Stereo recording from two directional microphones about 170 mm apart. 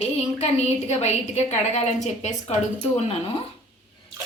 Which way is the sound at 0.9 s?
40° left (ahead or behind).